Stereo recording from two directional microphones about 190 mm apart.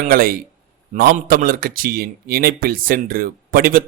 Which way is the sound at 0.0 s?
50° right (ahead or behind).